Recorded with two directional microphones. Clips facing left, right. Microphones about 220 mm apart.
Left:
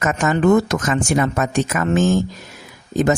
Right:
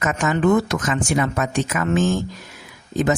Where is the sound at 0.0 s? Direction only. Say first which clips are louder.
Left 2 dB; 45° left (ahead or behind).